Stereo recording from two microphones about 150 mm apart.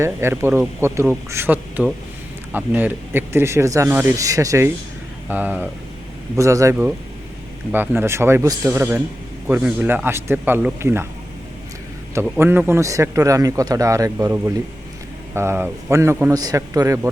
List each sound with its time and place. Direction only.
0.0 s a man's voice: 15° right (ahead or behind)
12.4 s a man's voice: 15° right (ahead or behind)